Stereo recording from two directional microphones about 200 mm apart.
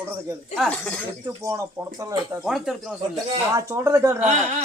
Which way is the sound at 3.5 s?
15° right (ahead or behind).